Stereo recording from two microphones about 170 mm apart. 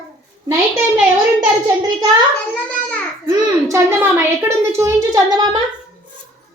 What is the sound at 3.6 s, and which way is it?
A woman's voice, 15° right (ahead or behind).